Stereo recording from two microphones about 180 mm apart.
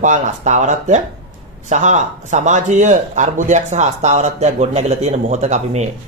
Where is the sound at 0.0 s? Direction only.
45° right (ahead or behind).